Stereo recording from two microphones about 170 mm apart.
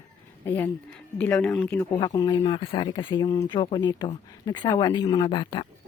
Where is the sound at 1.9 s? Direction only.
20° left (ahead or behind).